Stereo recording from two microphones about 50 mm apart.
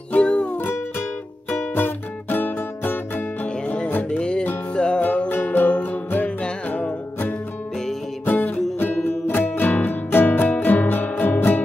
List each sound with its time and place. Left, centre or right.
0.2 s music: left
0.6 s music: left
3.4 s music: left
5.3 s music: left
5.7 s music: left
8.3 s music: left